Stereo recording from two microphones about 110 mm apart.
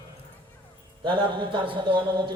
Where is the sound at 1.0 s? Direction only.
50° right (ahead or behind).